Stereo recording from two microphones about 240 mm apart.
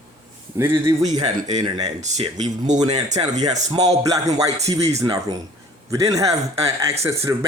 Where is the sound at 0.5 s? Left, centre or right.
Centre.